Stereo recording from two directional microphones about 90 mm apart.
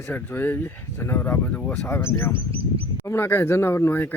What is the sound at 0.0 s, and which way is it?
Speech, 25° left (ahead or behind).